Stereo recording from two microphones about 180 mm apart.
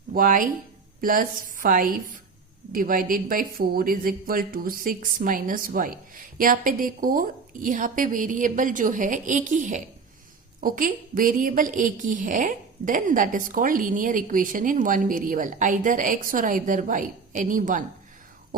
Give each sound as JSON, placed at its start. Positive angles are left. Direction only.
{"t": 0.1, "sound": "a woman's voice", "side_deg": -50}